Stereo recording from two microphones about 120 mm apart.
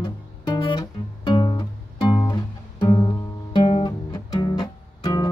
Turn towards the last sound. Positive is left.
turn(degrees=35)  # may be behind; listen again after turning